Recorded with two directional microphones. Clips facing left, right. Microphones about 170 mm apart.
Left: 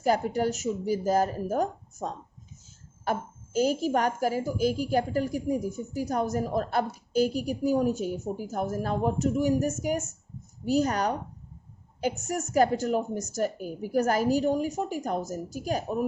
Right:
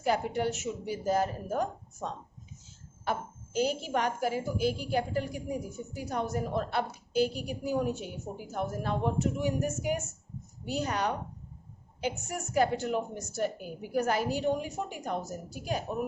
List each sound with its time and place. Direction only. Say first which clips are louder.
0.0 s a woman's voice: left 4 dB; 40° left (ahead or behind)